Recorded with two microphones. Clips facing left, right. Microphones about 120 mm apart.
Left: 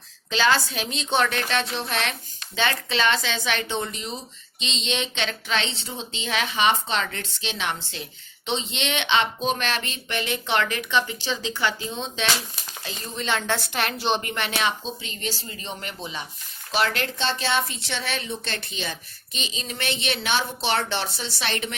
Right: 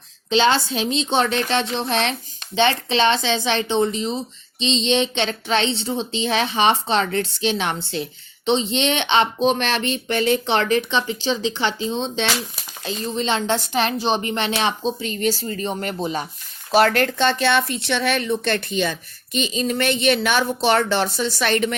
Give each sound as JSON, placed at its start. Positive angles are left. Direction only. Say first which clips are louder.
{"t": 0.3, "sound": "a woman's voice", "louder": "right 4 dB", "side_deg": -25}
{"t": 14.2, "sound": "a woman's voice", "louder": "right 5 dB", "side_deg": -25}
{"t": 15.0, "sound": "a woman's voice", "louder": "right 10 dB", "side_deg": -45}